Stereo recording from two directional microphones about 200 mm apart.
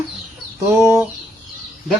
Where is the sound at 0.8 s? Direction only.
10° right (ahead or behind).